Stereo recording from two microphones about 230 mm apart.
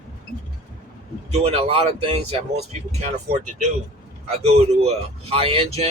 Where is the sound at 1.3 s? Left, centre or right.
Right.